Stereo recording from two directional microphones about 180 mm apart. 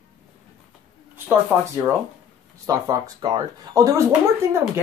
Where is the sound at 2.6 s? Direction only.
20° right (ahead or behind).